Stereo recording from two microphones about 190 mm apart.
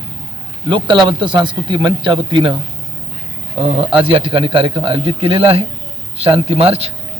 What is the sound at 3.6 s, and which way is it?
A man's voice, 30° right (ahead or behind).